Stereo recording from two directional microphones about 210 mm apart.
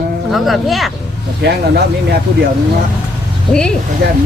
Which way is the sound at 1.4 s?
50° right (ahead or behind).